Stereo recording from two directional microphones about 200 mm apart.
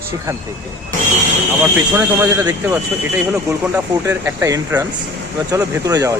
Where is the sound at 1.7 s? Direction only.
10° right (ahead or behind).